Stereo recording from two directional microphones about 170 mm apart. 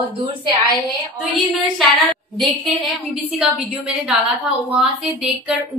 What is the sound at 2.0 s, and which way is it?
A woman's voice, centre (ahead or behind).